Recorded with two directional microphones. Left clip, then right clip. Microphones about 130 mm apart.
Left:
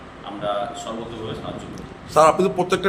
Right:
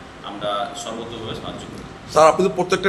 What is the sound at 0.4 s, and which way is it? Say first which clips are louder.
Speech: even; 15° right (ahead or behind).